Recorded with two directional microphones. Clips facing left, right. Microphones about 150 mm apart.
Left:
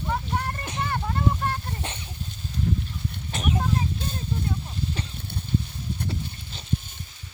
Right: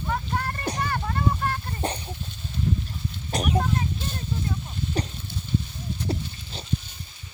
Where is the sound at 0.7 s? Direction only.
40° right (ahead or behind).